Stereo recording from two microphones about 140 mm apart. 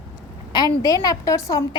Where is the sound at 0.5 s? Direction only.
25° left (ahead or behind).